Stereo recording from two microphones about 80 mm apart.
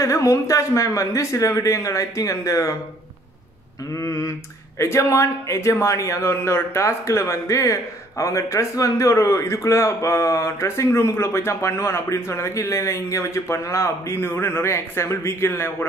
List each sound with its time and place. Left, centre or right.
0.0 s speech: left
3.9 s speech: left